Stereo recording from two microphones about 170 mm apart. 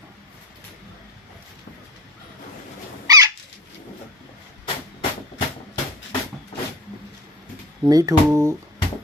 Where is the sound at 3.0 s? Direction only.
20° right (ahead or behind).